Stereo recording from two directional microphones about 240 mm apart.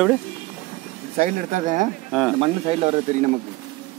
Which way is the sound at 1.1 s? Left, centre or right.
Right.